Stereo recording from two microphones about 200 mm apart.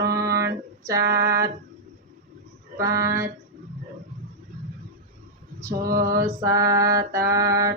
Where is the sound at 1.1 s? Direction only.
15° right (ahead or behind).